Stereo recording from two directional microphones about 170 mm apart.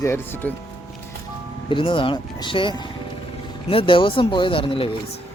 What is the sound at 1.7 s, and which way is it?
Speech, 30° left (ahead or behind).